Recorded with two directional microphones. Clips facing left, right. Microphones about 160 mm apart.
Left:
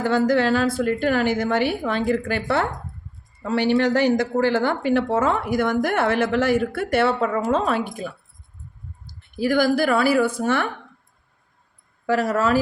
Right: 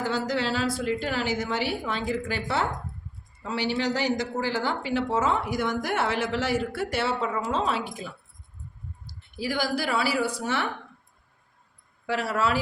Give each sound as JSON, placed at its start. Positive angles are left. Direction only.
{"t": 0.0, "sound": "speech", "side_deg": 55}
{"t": 9.4, "sound": "a woman's voice", "side_deg": 55}
{"t": 12.0, "sound": "a woman's voice", "side_deg": 45}